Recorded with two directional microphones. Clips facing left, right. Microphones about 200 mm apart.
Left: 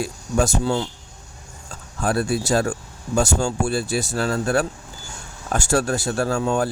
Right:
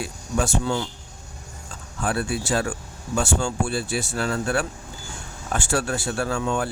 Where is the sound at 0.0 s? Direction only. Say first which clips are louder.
Left 4 dB; 40° left (ahead or behind).